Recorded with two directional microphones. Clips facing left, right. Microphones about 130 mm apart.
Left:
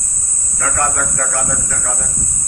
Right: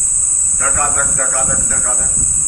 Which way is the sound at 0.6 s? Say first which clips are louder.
Even; 15° right (ahead or behind).